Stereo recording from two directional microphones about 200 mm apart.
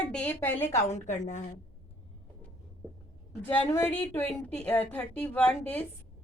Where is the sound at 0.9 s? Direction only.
35° left (ahead or behind).